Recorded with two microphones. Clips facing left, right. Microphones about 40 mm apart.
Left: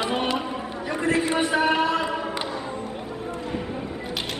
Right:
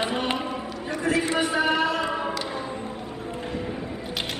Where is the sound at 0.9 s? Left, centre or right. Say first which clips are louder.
Left 1 dB; left.